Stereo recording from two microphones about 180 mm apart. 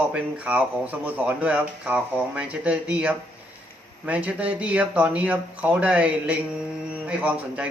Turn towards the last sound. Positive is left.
turn(degrees=-5)  # may be behind; listen again after turning